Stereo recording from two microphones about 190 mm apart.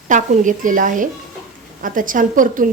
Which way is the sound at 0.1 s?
45° right (ahead or behind).